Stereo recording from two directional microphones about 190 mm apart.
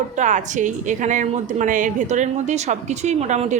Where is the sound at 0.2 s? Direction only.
40° right (ahead or behind).